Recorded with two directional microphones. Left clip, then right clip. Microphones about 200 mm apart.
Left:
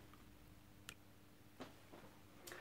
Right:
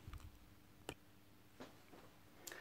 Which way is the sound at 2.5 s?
40° right (ahead or behind).